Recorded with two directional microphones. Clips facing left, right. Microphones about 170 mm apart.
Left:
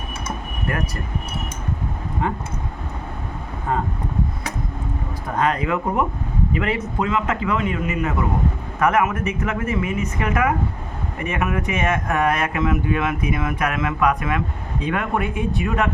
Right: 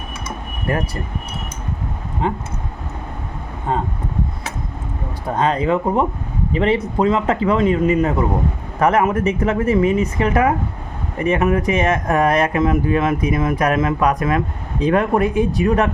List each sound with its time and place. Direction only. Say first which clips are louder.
0.7 s speech: right 5 dB; 30° right (ahead or behind)
2.2 s speech: right 4 dB; 20° right (ahead or behind)
5.4 s speech: right 4 dB; 30° right (ahead or behind)